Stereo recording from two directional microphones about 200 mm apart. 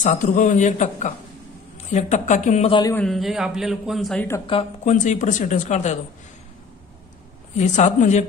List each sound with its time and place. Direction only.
0.0 s speech: 40° left (ahead or behind)
2.9 s a man's voice: 5° left (ahead or behind)
4.4 s speech: 30° left (ahead or behind)
7.5 s speech: 35° left (ahead or behind)